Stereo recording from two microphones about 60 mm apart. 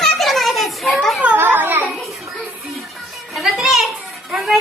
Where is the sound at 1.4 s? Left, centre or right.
Right.